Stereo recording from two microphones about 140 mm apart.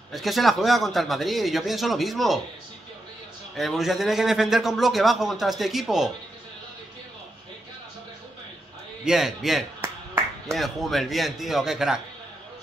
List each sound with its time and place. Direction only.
0.1 s a man's voice: centre (ahead or behind)
3.5 s a man's voice: centre (ahead or behind)
9.0 s a man's voice: 5° right (ahead or behind)